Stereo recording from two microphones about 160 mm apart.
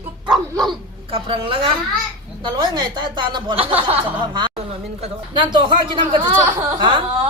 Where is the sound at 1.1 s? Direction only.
35° right (ahead or behind).